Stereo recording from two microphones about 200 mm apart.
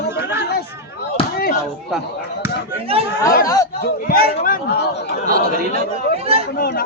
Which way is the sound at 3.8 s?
50° left (ahead or behind).